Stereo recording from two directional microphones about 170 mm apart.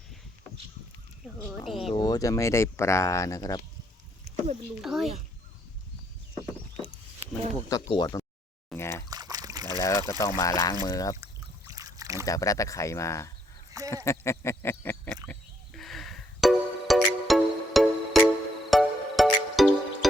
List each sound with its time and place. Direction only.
1.6 s a child's voice: centre (ahead or behind)
2.0 s speech: 20° left (ahead or behind)
4.8 s a child's voice: centre (ahead or behind)
7.7 s speech: 25° left (ahead or behind)
9.0 s a sound: 20° right (ahead or behind)
9.7 s speech: 20° left (ahead or behind)
11.2 s boat: 20° right (ahead or behind)
12.2 s speech: 20° left (ahead or behind)
13.9 s a sound: 15° left (ahead or behind); by 18.2 s centre (ahead or behind)
18.7 s music: centre (ahead or behind)